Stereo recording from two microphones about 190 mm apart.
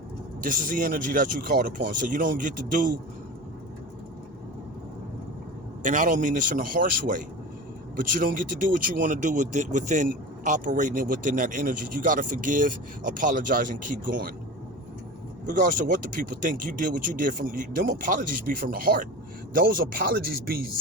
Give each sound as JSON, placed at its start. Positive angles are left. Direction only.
{"t": 0.4, "sound": "speech", "side_deg": -45}
{"t": 5.8, "sound": "speech", "side_deg": -45}
{"t": 15.4, "sound": "speech", "side_deg": -45}